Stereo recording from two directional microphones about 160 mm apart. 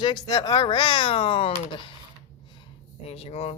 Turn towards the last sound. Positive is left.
turn(degrees=40)  # may be behind; listen again after turning